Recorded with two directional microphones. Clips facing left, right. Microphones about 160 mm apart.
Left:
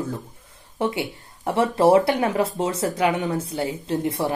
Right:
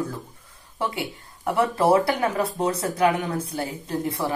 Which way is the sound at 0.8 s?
25° left (ahead or behind).